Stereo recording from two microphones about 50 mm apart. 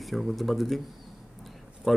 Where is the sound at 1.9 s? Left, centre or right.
Centre.